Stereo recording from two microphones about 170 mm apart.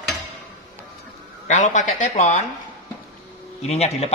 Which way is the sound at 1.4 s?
45° left (ahead or behind).